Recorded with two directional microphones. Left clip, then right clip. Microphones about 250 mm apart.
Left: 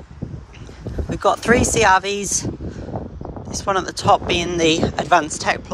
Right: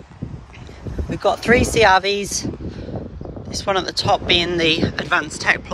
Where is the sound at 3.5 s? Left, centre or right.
Centre.